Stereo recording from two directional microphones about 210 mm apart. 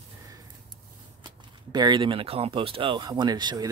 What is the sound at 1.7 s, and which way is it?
Speech, 20° right (ahead or behind).